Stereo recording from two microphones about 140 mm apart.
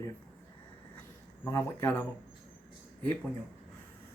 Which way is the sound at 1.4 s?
20° left (ahead or behind).